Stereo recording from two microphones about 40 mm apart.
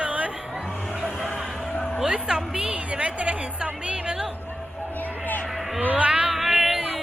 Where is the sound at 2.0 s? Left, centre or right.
Right.